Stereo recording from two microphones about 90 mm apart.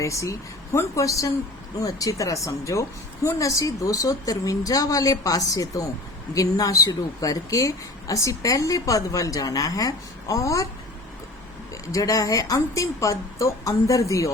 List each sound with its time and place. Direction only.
0.0 s speech: 35° left (ahead or behind)
11.7 s speech: 35° left (ahead or behind)